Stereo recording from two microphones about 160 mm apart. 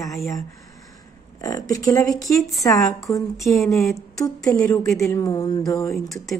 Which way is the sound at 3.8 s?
20° left (ahead or behind).